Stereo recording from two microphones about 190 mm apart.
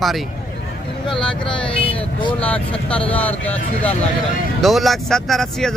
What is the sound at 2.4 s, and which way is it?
Speech, 5° left (ahead or behind).